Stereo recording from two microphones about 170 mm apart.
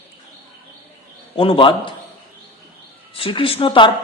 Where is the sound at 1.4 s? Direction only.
30° left (ahead or behind).